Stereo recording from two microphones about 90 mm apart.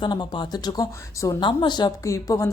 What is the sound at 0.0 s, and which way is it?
Speech, 60° left (ahead or behind).